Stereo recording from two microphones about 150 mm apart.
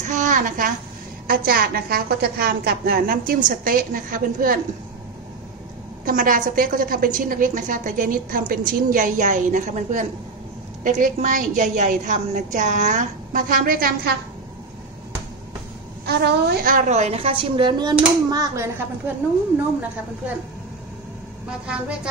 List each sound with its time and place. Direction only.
0.0 s a sound: 60° right (ahead or behind)
1.2 s a woman's voice: 75° right (ahead or behind)
6.0 s a woman's voice: 65° right (ahead or behind); by 14.1 s 80° right
16.1 s a woman's voice: 90° right; by 16.9 s 70° right (ahead or behind)
16.9 s speech: 45° right (ahead or behind); by 18.7 s 25° right (ahead or behind)
21.5 s a woman's voice: 5° right (ahead or behind)